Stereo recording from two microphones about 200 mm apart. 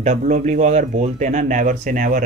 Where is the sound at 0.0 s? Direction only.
35° right (ahead or behind).